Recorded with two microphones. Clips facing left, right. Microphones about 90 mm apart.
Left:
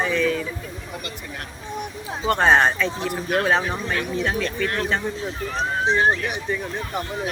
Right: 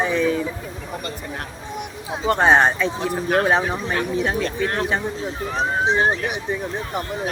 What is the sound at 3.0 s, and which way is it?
Speech, 30° right (ahead or behind).